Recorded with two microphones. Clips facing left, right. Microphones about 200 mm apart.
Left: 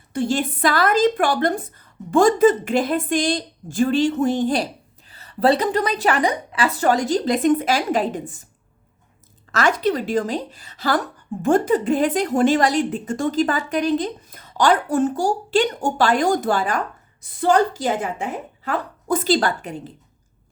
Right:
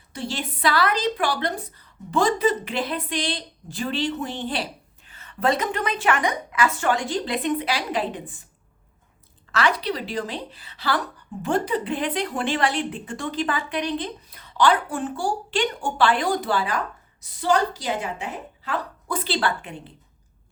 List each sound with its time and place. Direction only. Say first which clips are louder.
0.1 s speech: left 9 dB; 50° left (ahead or behind)
9.5 s speech: left 4 dB; 45° left (ahead or behind)